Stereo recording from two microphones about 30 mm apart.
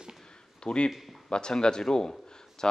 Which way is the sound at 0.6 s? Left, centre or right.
Left.